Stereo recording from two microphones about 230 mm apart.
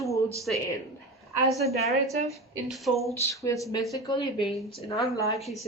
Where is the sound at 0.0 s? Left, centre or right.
Centre.